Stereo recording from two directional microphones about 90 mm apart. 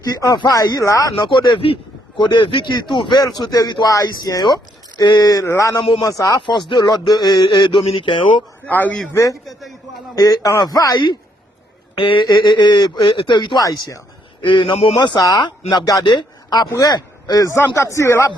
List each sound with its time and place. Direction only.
0.0 s speech: 45° left (ahead or behind)
1.2 s speech: 60° left (ahead or behind)
3.2 s speech: 45° left (ahead or behind)
3.8 s speech: 40° left (ahead or behind)
5.5 s speech: 35° left (ahead or behind)
6.5 s speech: 60° left (ahead or behind)
8.6 s a man's voice: 20° left (ahead or behind)
9.1 s speech: 35° left (ahead or behind)
9.5 s a sound: centre (ahead or behind)
10.2 s speech: 45° left (ahead or behind)
11.9 s speech: 70° left (ahead or behind)
12.2 s speech: 50° left (ahead or behind); by 14.7 s 70° left (ahead or behind)
14.9 s a man's voice: 55° left (ahead or behind); by 18.3 s 30° left (ahead or behind)